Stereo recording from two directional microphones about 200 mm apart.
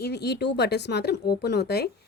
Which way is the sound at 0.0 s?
55° left (ahead or behind).